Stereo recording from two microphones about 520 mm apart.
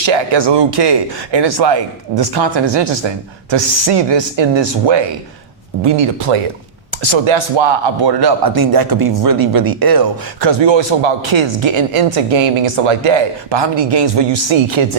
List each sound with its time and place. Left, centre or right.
0.0 s speech: right
5.8 s speech: right